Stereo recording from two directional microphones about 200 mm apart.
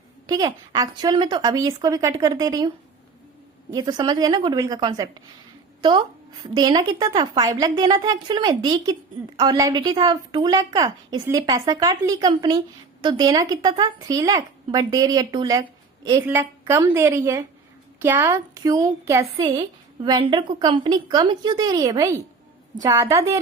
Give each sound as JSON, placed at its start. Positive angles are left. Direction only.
{"t": 0.3, "sound": "a woman's voice", "side_deg": -20}